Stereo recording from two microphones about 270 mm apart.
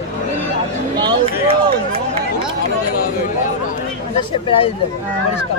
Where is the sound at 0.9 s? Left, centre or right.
Centre.